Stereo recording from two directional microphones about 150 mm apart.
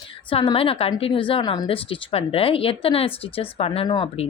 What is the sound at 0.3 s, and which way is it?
Speech, 35° left (ahead or behind).